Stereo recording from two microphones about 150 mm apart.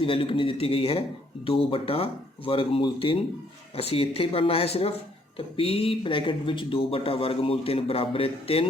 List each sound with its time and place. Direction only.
0.0 s a man's voice: 35° left (ahead or behind)